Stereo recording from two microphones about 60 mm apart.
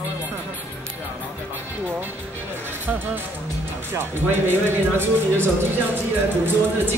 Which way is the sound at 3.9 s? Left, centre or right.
Right.